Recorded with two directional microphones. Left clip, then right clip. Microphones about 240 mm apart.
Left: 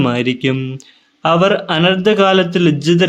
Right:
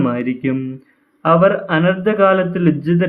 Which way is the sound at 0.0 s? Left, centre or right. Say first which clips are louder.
Left 3 dB; left.